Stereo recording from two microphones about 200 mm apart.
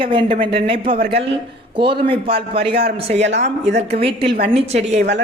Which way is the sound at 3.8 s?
30° right (ahead or behind).